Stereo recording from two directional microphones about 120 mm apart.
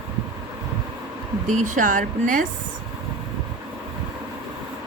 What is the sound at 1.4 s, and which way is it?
Speech, 90° right.